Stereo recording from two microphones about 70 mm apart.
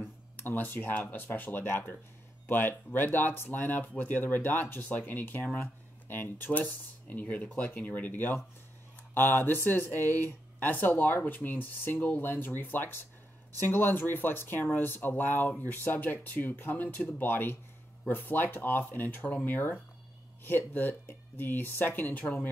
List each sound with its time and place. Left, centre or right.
0.0 s speech: left